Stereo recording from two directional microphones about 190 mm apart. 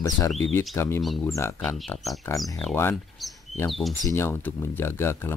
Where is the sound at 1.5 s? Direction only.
5° left (ahead or behind).